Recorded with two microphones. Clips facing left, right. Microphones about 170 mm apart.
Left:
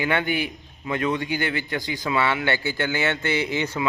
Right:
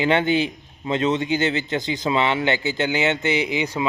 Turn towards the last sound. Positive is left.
turn(degrees=-15)  # may be behind; listen again after turning